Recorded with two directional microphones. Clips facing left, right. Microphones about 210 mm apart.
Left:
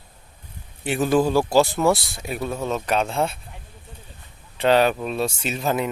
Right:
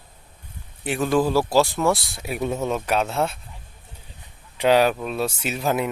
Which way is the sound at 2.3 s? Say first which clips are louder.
Right 2 dB; 20° right (ahead or behind).